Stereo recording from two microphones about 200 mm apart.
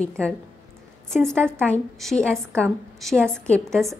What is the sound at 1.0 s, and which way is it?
A woman's voice, 5° left (ahead or behind).